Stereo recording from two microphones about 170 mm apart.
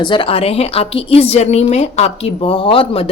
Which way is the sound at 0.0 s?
30° left (ahead or behind).